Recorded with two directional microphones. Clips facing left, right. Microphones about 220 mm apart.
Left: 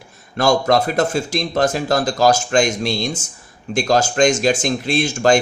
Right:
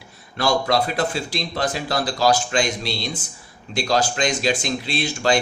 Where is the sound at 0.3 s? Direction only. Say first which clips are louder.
Left 5 dB; 45° left (ahead or behind).